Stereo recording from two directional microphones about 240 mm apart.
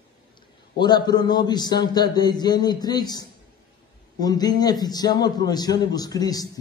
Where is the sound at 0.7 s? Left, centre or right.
Centre.